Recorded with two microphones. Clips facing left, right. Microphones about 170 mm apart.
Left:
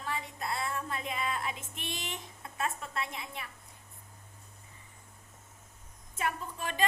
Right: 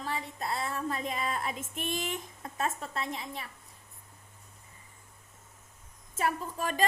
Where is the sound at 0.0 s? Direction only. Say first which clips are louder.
Right 2 dB; 35° right (ahead or behind).